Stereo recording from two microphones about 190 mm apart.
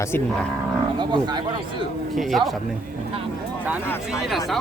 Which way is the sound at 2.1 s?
Centre (ahead or behind).